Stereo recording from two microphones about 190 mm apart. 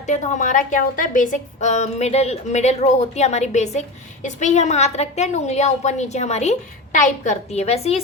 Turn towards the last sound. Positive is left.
turn(degrees=35)  # may be behind; listen again after turning